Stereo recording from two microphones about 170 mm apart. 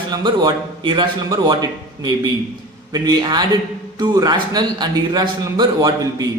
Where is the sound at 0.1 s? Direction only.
25° right (ahead or behind).